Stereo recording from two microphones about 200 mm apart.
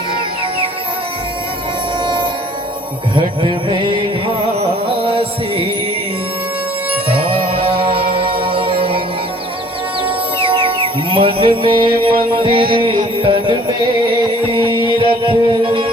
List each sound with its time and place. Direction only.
4.9 s music: 25° right (ahead or behind)
7.1 s mantra: 25° right (ahead or behind)
8.1 s music: 25° right (ahead or behind)
10.4 s music: 25° right (ahead or behind)
14.8 s music: 25° right (ahead or behind)